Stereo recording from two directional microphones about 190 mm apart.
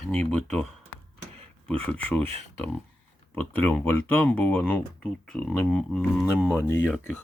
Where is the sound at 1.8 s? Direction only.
5° left (ahead or behind).